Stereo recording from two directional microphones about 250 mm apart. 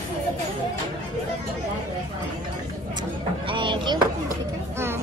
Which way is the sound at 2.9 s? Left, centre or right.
Centre.